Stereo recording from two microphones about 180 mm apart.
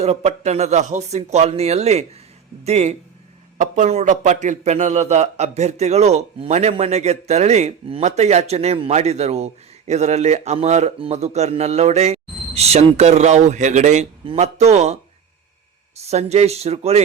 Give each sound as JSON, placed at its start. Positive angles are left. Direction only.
{"t": 0.0, "sound": "a man's voice", "side_deg": -35}
{"t": 16.0, "sound": "a man's voice", "side_deg": -35}